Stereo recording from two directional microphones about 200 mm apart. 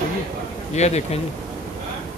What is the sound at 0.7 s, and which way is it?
Speech, 35° left (ahead or behind).